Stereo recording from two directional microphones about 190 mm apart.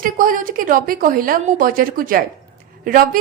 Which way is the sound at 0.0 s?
45° right (ahead or behind).